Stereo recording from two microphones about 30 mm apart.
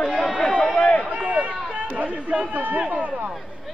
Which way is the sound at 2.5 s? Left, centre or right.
Right.